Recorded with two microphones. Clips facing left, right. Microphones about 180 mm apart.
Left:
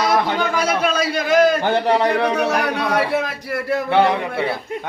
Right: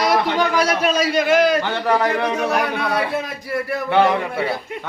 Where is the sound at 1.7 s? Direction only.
30° left (ahead or behind).